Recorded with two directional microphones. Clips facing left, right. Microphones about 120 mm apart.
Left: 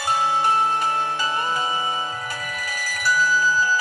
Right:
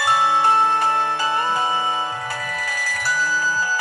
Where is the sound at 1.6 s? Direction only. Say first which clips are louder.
Right 3 dB; 50° right (ahead or behind).